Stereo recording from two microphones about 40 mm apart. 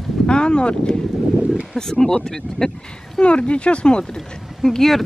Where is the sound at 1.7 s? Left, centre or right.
Centre.